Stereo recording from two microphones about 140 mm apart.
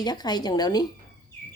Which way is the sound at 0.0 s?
30° left (ahead or behind).